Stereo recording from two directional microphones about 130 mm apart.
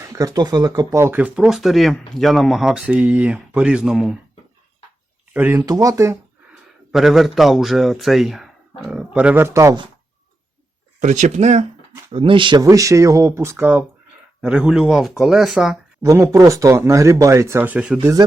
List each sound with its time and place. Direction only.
0.0 s speech: 25° right (ahead or behind); by 4.2 s 5° right (ahead or behind)
5.3 s speech: 15° right (ahead or behind)
5.6 s speech: 25° right (ahead or behind)
6.5 s speech: centre (ahead or behind); by 9.7 s 20° right (ahead or behind)
11.0 s speech: 65° right (ahead or behind)
12.1 s speech: 40° right (ahead or behind)
12.6 s speech: 25° right (ahead or behind); by 15.8 s centre (ahead or behind)
16.0 s speech: 25° right (ahead or behind); by 18.0 s 10° right (ahead or behind)